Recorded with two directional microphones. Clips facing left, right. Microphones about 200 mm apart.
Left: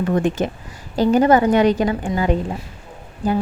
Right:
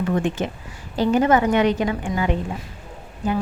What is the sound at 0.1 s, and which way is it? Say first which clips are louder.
Speech: left 3 dB; 40° left (ahead or behind).